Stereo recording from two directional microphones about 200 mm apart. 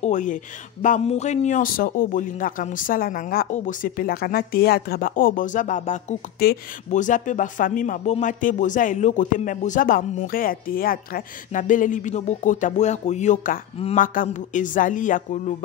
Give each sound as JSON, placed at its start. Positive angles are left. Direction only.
{"t": 0.0, "sound": "a man's voice", "side_deg": 40}